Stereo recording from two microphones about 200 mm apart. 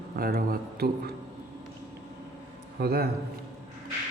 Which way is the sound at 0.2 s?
50° right (ahead or behind).